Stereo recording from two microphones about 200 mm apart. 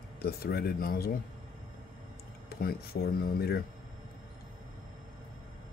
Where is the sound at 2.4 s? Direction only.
50° left (ahead or behind).